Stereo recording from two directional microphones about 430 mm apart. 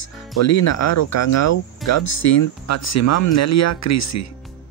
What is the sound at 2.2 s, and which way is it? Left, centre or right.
Speech, left.